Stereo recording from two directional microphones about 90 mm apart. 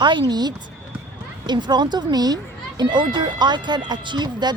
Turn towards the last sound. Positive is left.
turn(degrees=-55)  # may be behind; listen again after turning